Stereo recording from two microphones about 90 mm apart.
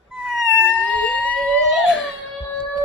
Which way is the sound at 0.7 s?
15° left (ahead or behind).